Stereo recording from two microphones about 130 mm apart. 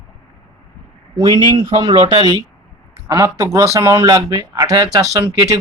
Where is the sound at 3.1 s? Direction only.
20° right (ahead or behind).